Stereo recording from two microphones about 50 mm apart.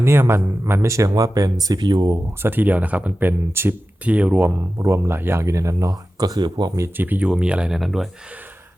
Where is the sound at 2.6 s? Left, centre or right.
Right.